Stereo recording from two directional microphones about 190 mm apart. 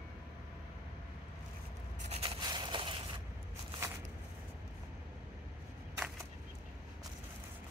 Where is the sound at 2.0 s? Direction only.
30° right (ahead or behind).